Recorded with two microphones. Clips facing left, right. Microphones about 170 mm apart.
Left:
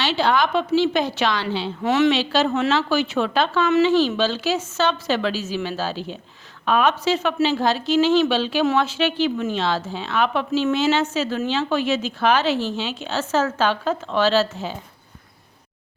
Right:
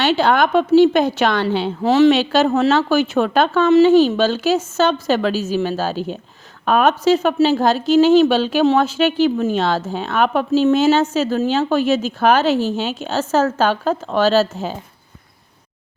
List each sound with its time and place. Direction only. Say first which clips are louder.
0.0 s a woman's voice: right 5 dB; 50° right (ahead or behind)
1.8 s a woman's voice: right 6 dB; 35° right (ahead or behind)
2.1 s a woman's voice: right 5 dB; 45° right (ahead or behind)